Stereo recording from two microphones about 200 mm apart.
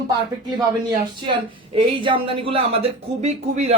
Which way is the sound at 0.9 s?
25° right (ahead or behind).